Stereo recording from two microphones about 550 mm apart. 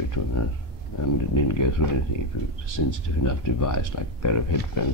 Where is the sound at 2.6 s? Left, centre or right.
Left.